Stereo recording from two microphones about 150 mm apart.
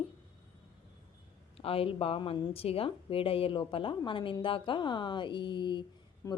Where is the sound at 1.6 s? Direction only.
40° left (ahead or behind).